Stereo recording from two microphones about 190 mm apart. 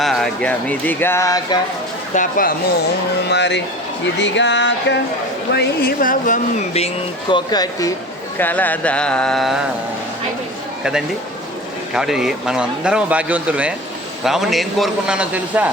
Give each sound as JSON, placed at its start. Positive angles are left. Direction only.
{"t": 0.0, "sound": "speech", "side_deg": 0}
{"t": 2.1, "sound": "speech", "side_deg": 50}
{"t": 3.2, "sound": "speech", "side_deg": 65}
{"t": 4.0, "sound": "a sound", "side_deg": 70}
{"t": 5.5, "sound": "speech", "side_deg": 50}
{"t": 8.4, "sound": "speech", "side_deg": 10}
{"t": 11.9, "sound": "speech", "side_deg": -5}